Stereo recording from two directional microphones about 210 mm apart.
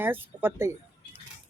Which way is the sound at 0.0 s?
10° right (ahead or behind).